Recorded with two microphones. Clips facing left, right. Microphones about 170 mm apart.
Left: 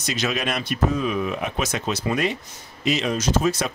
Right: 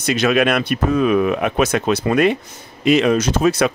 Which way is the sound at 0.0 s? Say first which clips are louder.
Right 9 dB; 60° right (ahead or behind).